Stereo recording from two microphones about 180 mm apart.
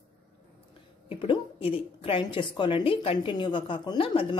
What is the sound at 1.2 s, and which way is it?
A woman's voice, 30° left (ahead or behind).